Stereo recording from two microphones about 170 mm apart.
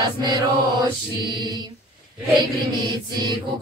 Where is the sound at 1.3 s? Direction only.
25° right (ahead or behind).